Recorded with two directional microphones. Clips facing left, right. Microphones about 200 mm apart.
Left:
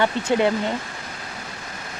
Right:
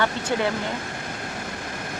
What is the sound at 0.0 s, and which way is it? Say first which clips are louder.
Speech: left 4 dB; 20° left (ahead or behind).